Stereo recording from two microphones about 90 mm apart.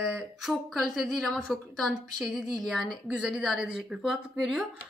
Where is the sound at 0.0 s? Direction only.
5° right (ahead or behind).